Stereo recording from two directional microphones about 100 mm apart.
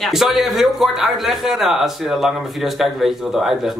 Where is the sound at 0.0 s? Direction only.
Centre (ahead or behind).